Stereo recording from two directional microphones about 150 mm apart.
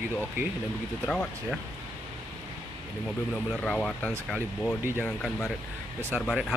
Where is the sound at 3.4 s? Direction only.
5° left (ahead or behind).